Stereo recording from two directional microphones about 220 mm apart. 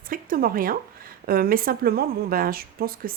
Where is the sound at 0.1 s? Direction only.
40° right (ahead or behind).